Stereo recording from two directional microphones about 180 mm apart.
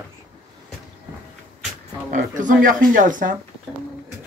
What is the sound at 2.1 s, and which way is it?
Speech, 45° right (ahead or behind).